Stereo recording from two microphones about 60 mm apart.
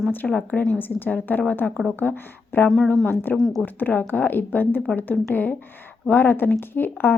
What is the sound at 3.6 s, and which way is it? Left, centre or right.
A woman's voice, left.